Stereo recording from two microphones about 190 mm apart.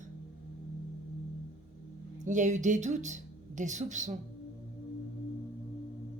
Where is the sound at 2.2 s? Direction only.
40° right (ahead or behind).